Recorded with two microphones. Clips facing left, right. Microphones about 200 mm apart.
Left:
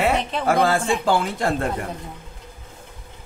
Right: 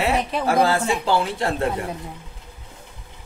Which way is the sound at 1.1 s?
45° left (ahead or behind).